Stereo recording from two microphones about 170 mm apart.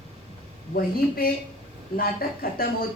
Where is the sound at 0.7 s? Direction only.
60° left (ahead or behind).